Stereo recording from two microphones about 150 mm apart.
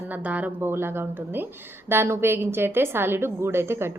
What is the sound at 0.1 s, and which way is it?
Speech, 10° right (ahead or behind).